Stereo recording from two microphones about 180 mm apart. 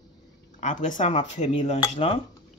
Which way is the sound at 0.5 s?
45° left (ahead or behind).